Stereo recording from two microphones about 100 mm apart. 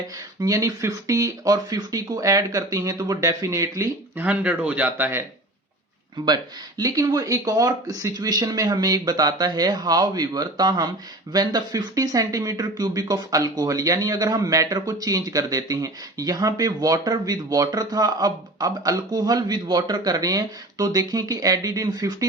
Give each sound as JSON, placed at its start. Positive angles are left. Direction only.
{"t": 0.3, "sound": "speech", "side_deg": -35}
{"t": 4.2, "sound": "speech", "side_deg": -15}
{"t": 6.2, "sound": "speech", "side_deg": -40}